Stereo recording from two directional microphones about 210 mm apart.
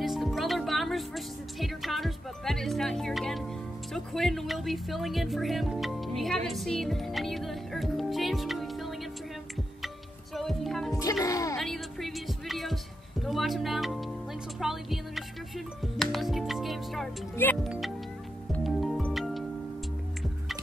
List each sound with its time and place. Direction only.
0.0 s music: centre (ahead or behind)
3.9 s speech: centre (ahead or behind)
10.3 s music: centre (ahead or behind)
11.0 s music: 15° left (ahead or behind)
11.5 s music: centre (ahead or behind)